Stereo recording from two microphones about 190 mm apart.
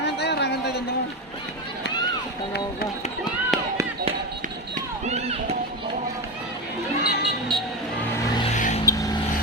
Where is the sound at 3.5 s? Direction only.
Centre (ahead or behind).